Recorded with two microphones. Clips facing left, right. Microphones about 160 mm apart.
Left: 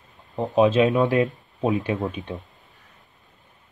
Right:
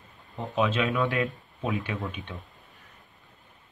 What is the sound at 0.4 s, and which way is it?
Speech, 40° left (ahead or behind).